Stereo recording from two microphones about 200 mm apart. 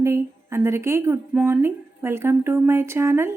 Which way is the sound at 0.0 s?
15° right (ahead or behind).